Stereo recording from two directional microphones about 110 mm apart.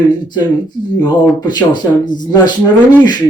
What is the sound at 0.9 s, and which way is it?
Speech, 40° left (ahead or behind).